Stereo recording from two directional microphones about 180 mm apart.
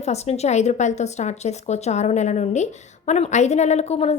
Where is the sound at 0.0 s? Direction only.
35° left (ahead or behind).